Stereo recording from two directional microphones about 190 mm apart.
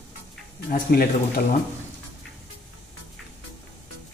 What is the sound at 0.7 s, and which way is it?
Speech, 50° left (ahead or behind).